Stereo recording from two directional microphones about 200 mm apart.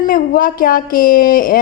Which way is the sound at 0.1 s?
45° left (ahead or behind).